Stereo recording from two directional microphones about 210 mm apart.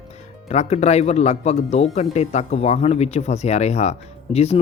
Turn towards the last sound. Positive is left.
turn(degrees=30)  # may be behind; listen again after turning